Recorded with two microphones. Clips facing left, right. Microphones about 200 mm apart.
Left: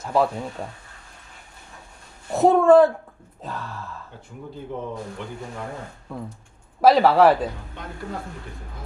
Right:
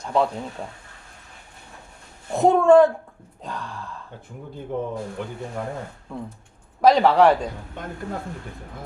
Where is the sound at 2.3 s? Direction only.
Centre (ahead or behind).